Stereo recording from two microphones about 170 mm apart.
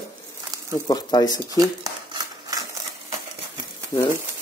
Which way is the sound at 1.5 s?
20° right (ahead or behind).